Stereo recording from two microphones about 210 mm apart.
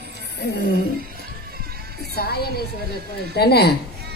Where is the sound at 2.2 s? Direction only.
50° left (ahead or behind).